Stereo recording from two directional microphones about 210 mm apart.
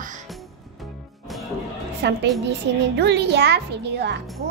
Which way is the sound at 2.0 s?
55° right (ahead or behind).